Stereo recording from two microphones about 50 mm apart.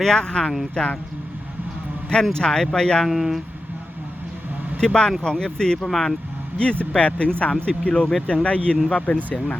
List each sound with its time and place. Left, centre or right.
0.0 s speech: centre
2.3 s speech: centre
3.1 s speech: centre
4.8 s speech: centre
6.6 s speech: left